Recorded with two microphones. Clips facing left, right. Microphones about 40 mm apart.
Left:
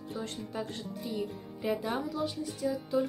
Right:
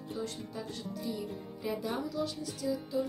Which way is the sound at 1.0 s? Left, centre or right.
Left.